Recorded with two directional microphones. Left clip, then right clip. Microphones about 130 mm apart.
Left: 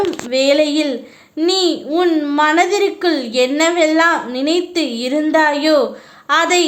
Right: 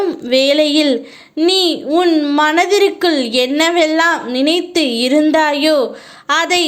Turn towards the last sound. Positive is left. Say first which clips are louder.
# even
turn(degrees=-30)  # may be behind; listen again after turning